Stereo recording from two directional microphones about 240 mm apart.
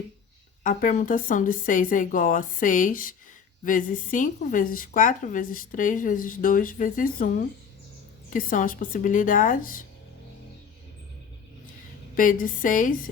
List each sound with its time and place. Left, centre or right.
0.6 s a woman's voice: left
12.1 s a woman's voice: left